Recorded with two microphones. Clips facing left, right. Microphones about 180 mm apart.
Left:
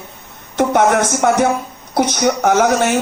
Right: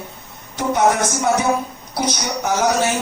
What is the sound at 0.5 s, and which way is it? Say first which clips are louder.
A woman's voice: left 4 dB; 70° left (ahead or behind).